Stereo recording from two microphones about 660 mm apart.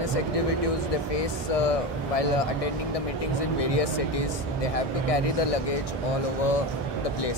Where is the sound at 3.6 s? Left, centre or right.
Left.